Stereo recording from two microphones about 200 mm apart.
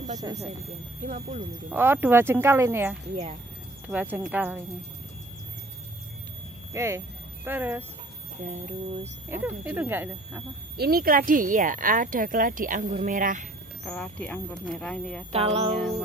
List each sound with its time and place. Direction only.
0.2 s speech: 15° right (ahead or behind)
1.0 s speech: 40° right (ahead or behind)
1.7 s speech: 10° right (ahead or behind)
6.7 s speech: 15° right (ahead or behind)
8.4 s speech: 35° right (ahead or behind)
9.3 s speech: 10° right (ahead or behind)
10.8 s speech: 50° right (ahead or behind)
13.8 s speech: 5° left (ahead or behind)
15.3 s music: 30° right (ahead or behind)